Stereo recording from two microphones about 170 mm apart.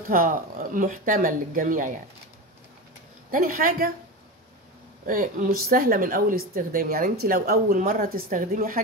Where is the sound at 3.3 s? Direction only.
55° right (ahead or behind).